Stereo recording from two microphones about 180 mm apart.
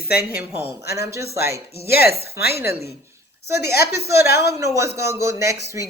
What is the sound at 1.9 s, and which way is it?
Speech, 60° left (ahead or behind).